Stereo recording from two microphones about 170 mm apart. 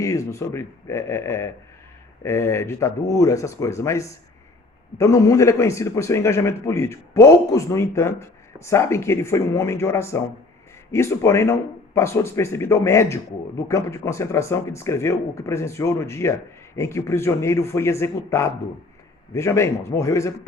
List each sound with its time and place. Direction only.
0.0 s a man's voice: 20° left (ahead or behind)